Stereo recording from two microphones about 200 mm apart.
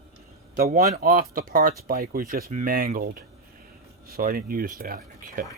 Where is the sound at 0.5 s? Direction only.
45° right (ahead or behind).